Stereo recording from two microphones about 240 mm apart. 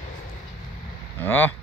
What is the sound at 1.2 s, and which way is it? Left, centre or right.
Speech, centre.